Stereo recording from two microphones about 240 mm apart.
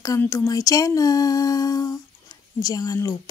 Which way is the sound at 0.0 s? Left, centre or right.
Centre.